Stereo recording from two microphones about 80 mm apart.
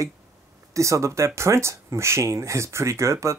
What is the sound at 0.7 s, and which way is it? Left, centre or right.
Speech, right.